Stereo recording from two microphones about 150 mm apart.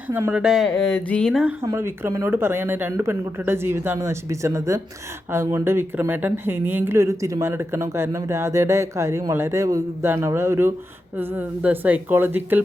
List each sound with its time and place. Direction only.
0.1 s speech: 10° right (ahead or behind)
1.6 s a woman's voice: 20° right (ahead or behind)